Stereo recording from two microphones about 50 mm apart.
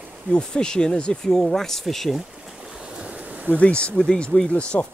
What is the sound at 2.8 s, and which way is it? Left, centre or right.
Waves, right.